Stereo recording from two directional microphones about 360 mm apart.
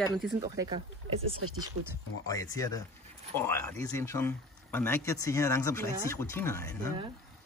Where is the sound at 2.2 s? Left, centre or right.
Centre.